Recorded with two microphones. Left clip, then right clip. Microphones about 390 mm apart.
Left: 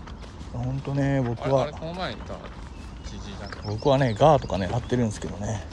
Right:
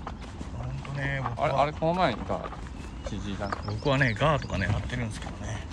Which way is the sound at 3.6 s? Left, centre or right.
Centre.